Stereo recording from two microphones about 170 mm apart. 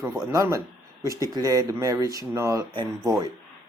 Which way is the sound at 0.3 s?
20° right (ahead or behind).